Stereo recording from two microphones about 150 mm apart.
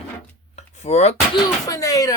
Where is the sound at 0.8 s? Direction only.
45° left (ahead or behind).